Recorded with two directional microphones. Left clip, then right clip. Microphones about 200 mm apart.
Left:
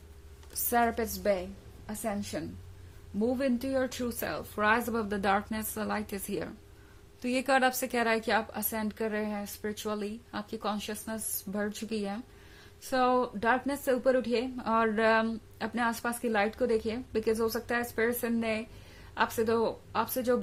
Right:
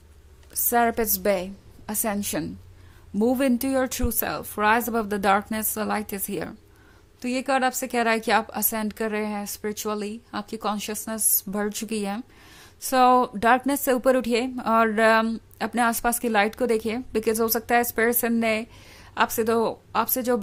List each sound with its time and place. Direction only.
0.7 s a woman's voice: 25° right (ahead or behind)